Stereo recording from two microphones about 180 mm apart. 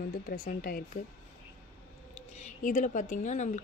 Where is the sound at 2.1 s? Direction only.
40° left (ahead or behind).